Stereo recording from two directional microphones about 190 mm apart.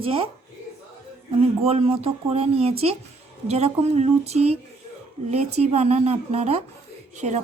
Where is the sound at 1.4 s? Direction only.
30° right (ahead or behind).